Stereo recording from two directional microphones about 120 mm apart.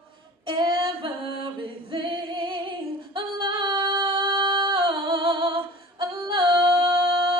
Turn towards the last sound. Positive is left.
turn(degrees=-45)  # may be behind; listen again after turning